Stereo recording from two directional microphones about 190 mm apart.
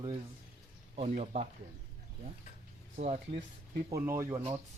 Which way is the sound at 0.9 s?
30° right (ahead or behind).